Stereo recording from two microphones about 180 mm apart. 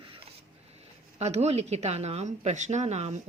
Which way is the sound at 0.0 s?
30° right (ahead or behind).